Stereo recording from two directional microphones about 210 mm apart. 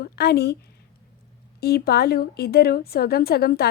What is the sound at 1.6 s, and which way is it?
A woman's voice, 50° left (ahead or behind).